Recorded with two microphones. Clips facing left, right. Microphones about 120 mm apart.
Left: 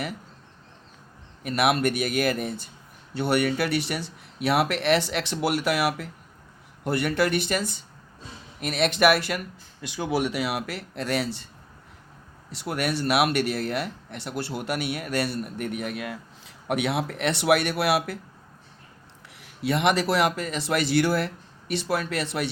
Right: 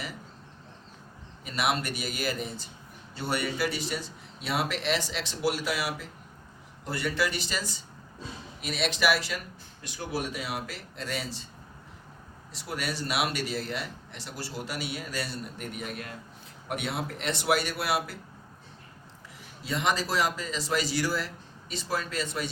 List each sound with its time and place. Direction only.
1.5 s a man's voice: 55° left (ahead or behind)
9.8 s speech: 90° left; by 11.4 s 65° left (ahead or behind)
12.5 s a man's voice: 65° left (ahead or behind)
19.4 s a man's voice: 65° left (ahead or behind)